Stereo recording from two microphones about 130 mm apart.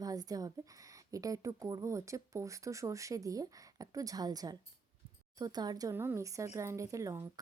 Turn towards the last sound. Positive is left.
turn(degrees=-20)  # may be behind; listen again after turning